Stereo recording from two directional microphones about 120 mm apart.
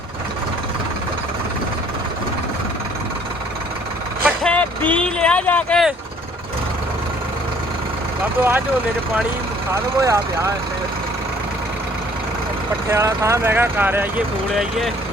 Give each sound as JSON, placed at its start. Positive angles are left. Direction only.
{"t": 4.4, "sound": "a sound", "side_deg": 10}
{"t": 8.4, "sound": "speech", "side_deg": -15}
{"t": 9.7, "sound": "speech", "side_deg": -25}
{"t": 12.9, "sound": "speech", "side_deg": -25}
{"t": 14.5, "sound": "speech", "side_deg": 0}